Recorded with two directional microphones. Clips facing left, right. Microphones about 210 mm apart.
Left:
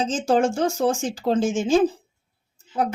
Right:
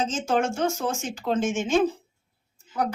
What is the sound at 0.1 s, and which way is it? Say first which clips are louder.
A woman's voice: left 5 dB; 30° left (ahead or behind).